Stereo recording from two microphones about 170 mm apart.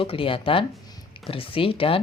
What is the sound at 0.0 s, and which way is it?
Speech, 30° left (ahead or behind).